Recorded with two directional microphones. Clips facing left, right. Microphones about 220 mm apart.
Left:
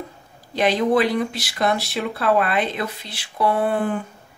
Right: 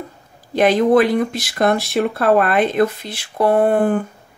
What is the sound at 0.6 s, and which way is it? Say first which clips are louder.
Speech: right 5 dB; 50° right (ahead or behind).